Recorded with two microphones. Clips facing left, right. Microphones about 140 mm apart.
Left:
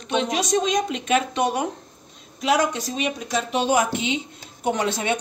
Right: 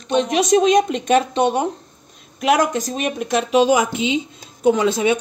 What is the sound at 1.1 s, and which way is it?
Speech, 30° right (ahead or behind).